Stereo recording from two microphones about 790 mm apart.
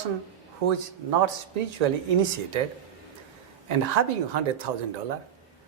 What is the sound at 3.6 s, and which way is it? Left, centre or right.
Speech, right.